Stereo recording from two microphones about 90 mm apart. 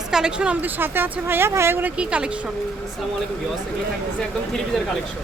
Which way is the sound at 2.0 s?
10° right (ahead or behind).